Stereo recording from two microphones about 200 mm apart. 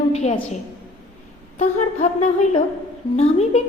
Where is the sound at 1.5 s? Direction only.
35° left (ahead or behind).